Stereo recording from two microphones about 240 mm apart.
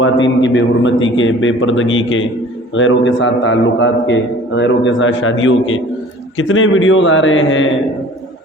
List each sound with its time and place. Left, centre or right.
0.4 s a man's voice: left